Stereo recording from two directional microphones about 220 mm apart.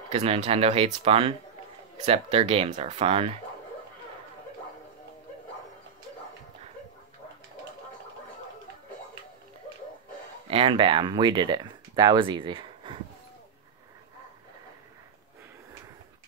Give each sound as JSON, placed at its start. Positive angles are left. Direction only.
{"t": 0.1, "sound": "speech", "side_deg": -30}
{"t": 10.5, "sound": "speech", "side_deg": -25}